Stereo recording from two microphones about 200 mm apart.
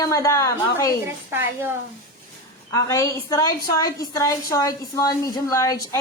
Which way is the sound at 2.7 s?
15° left (ahead or behind).